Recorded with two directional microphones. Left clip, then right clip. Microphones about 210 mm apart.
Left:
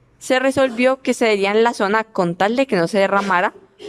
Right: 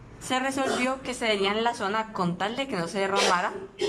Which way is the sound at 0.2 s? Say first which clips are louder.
Left 11 dB; 50° left (ahead or behind).